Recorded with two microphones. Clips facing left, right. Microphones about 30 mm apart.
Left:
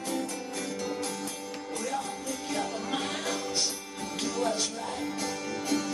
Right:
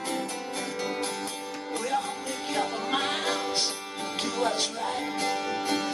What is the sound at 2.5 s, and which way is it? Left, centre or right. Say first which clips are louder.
Music: right 4 dB; right.